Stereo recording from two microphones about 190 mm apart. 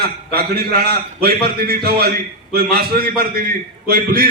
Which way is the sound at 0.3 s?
55° right (ahead or behind).